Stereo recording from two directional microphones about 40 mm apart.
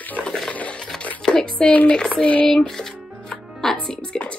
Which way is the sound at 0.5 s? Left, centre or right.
Left.